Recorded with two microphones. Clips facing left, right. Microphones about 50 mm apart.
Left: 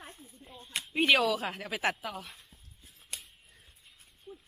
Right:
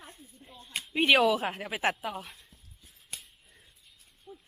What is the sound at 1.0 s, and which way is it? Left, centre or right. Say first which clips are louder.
Speech: right 3 dB; right.